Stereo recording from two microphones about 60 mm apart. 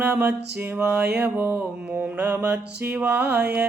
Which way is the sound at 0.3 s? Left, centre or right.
Right.